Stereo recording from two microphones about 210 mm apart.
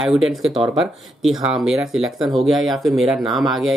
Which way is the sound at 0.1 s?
Centre (ahead or behind).